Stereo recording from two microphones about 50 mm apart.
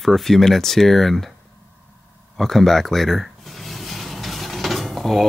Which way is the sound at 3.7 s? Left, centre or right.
Centre.